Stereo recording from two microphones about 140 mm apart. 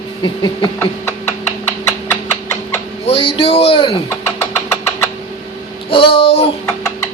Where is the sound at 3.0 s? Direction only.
40° left (ahead or behind).